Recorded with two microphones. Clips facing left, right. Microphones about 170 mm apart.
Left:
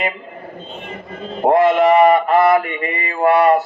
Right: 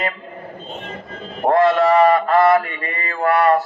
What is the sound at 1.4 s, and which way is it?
Mantra, 20° left (ahead or behind).